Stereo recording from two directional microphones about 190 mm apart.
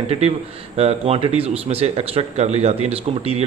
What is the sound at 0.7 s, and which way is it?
A man's voice, 30° right (ahead or behind).